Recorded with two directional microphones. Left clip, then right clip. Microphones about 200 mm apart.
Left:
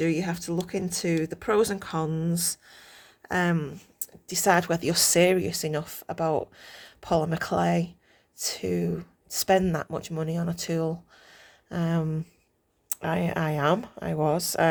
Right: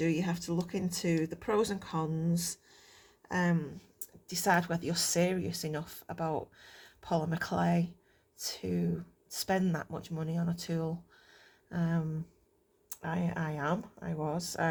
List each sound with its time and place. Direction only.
0.0 s speech: 30° left (ahead or behind)